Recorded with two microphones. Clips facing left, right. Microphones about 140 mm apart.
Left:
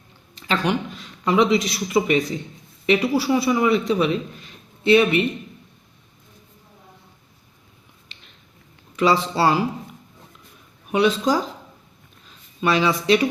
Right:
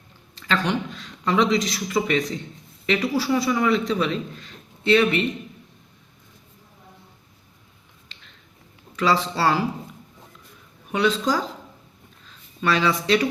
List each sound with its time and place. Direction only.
0.3 s a man's voice: 15° left (ahead or behind)
9.0 s a man's voice: 15° left (ahead or behind)
10.9 s a man's voice: 15° left (ahead or behind)
12.6 s a man's voice: 15° left (ahead or behind)